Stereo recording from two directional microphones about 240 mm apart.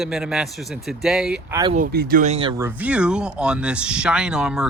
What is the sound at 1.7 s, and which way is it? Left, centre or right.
Speech, right.